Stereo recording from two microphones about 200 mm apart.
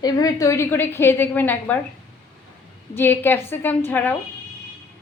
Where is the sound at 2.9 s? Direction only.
10° left (ahead or behind).